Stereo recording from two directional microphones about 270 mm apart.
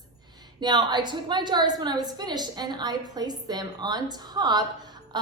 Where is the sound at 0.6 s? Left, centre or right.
Centre.